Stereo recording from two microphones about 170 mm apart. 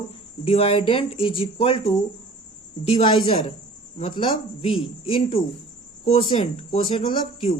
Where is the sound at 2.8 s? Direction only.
35° left (ahead or behind).